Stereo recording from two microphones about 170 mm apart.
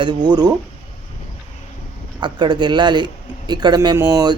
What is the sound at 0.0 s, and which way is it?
Speech, 25° right (ahead or behind).